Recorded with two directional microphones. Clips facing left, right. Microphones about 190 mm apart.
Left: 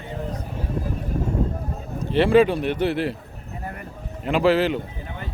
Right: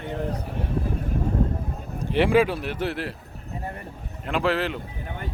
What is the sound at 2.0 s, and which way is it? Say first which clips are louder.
Speech: left 3 dB; 15° right (ahead or behind).